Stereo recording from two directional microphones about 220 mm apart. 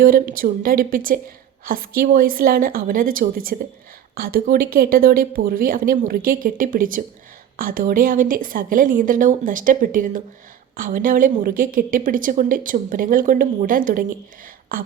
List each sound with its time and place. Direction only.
0.0 s a woman's voice: 40° right (ahead or behind)